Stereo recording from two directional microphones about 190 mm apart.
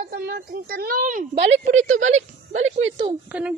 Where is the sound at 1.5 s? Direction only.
90° right.